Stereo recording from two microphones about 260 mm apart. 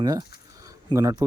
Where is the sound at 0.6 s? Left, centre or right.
Centre.